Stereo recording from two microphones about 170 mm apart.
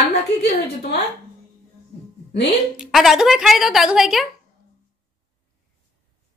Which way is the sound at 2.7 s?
5° right (ahead or behind).